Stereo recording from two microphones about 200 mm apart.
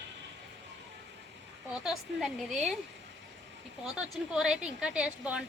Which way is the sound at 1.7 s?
Centre (ahead or behind).